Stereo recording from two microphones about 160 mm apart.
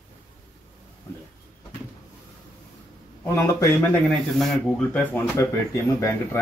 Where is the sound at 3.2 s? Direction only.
20° left (ahead or behind).